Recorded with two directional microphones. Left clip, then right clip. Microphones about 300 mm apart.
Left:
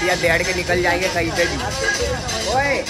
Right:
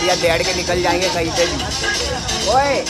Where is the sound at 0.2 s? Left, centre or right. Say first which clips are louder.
Right 1 dB; centre.